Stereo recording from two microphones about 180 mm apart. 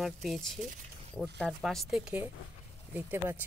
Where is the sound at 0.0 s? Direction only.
Centre (ahead or behind).